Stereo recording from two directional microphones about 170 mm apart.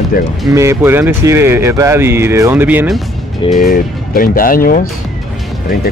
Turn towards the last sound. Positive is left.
turn(degrees=55)  # may be behind; listen again after turning